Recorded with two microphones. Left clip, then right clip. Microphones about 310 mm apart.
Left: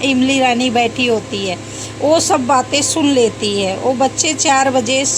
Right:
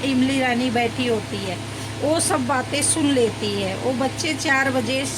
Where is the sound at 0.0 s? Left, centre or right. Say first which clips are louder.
Left 7 dB; centre.